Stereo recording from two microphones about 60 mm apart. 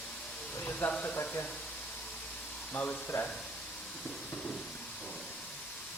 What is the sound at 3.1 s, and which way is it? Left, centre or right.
Speech, left.